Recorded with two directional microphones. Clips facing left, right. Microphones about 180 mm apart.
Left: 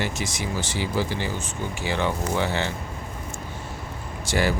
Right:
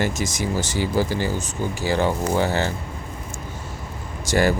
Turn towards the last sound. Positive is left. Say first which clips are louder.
# right 4 dB
turn(degrees=-45)  # may be behind; listen again after turning